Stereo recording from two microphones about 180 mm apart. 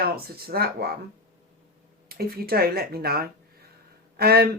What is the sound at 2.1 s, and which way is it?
Speech, 60° right (ahead or behind).